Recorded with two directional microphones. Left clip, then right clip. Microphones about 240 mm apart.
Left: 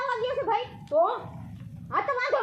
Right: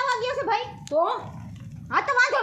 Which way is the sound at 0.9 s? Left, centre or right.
Right.